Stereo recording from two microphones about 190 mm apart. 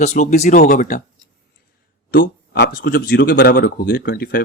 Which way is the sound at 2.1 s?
60° left (ahead or behind).